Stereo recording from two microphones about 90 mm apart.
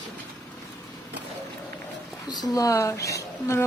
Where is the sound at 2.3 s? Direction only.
45° left (ahead or behind).